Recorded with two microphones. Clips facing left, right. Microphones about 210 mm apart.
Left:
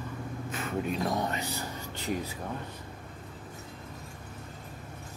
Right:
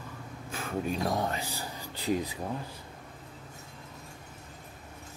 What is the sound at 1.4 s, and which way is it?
Speech, 30° right (ahead or behind).